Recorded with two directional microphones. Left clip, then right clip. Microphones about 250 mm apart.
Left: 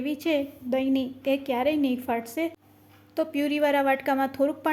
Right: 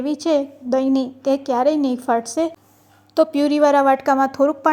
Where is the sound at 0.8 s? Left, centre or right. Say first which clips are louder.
Right 7 dB; right.